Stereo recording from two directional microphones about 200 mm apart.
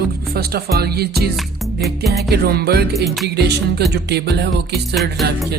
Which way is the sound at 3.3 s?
55° right (ahead or behind).